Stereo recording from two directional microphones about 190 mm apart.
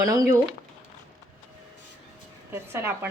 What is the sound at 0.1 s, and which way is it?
Speech, 20° right (ahead or behind).